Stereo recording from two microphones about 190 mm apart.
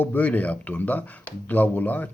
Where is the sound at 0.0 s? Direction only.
10° left (ahead or behind).